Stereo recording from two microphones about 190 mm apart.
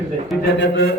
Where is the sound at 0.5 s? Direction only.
70° left (ahead or behind).